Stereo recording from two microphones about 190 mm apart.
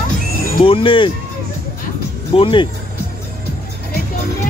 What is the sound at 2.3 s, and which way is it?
Speech, 30° left (ahead or behind).